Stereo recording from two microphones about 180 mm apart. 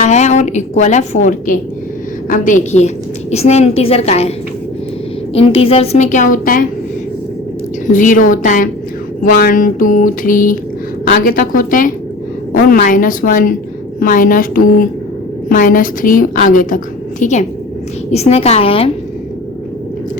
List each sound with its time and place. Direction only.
0.0 s a woman's voice: 40° left (ahead or behind)
5.3 s a woman's voice: 35° left (ahead or behind); by 6.7 s 50° left (ahead or behind)
7.9 s a woman's voice: 45° left (ahead or behind)